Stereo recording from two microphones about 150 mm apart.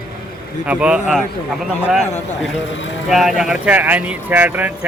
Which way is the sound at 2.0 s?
50° left (ahead or behind).